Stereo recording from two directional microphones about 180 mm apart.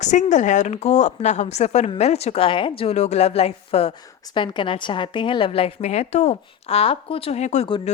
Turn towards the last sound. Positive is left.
turn(degrees=35)  # may be behind; listen again after turning